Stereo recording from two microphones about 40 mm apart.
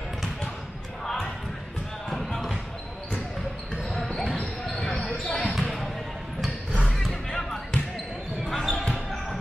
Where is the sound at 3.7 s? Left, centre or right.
Centre.